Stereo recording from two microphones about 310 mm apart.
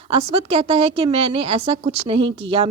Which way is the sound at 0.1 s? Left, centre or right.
Centre.